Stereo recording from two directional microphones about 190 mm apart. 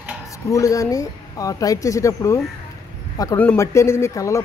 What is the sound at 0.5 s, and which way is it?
Speech, 15° left (ahead or behind).